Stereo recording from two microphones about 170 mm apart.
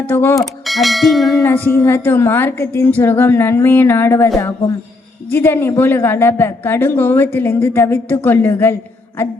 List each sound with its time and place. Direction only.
0.0 s a woman's voice: 10° left (ahead or behind)
0.6 s church bell: centre (ahead or behind)
1.4 s a woman's voice: 10° left (ahead or behind)